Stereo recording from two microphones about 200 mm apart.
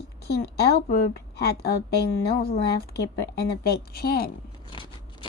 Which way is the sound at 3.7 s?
50° left (ahead or behind).